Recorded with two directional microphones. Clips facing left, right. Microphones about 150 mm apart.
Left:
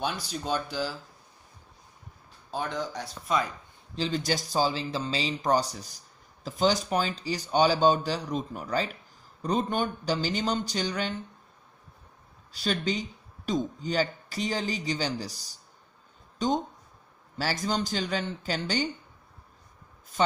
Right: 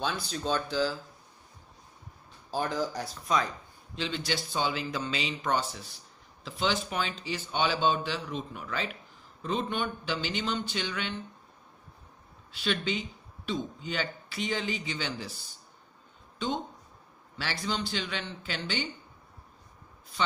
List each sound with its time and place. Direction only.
0.0 s speech: 10° left (ahead or behind)
2.5 s speech: centre (ahead or behind)
3.9 s speech: 40° left (ahead or behind)
12.5 s speech: 40° left (ahead or behind)
20.1 s speech: 45° left (ahead or behind)